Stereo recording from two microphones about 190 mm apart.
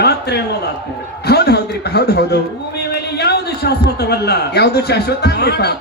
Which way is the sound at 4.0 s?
60° left (ahead or behind).